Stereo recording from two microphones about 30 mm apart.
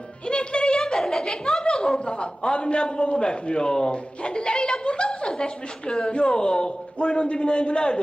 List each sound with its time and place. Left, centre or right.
0.3 s music: left
0.9 s chuckle: centre
1.6 s a woman's voice: left